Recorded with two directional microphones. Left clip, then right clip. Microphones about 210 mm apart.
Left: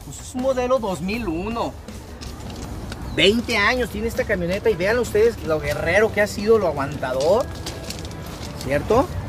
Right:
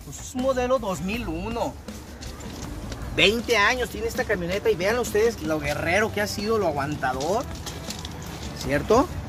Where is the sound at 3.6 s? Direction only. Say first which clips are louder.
Left 2 dB; 45° right (ahead or behind); by 6.8 s 30° right (ahead or behind).